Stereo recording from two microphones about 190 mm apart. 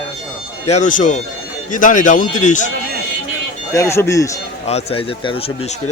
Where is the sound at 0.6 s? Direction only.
40° left (ahead or behind).